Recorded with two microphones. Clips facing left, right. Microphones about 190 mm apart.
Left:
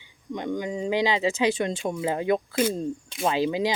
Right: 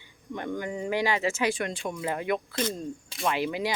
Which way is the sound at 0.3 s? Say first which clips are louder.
Left 3 dB; 15° left (ahead or behind).